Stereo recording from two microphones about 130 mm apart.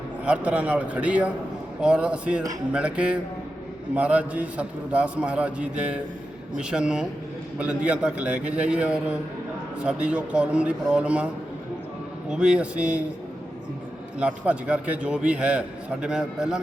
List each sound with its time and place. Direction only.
0.3 s a man's voice: 10° right (ahead or behind)
12.3 s a man's voice: 5° right (ahead or behind)
14.2 s a man's voice: 10° right (ahead or behind)